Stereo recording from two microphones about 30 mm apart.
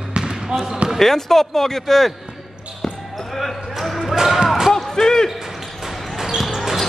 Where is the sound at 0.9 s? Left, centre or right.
Centre.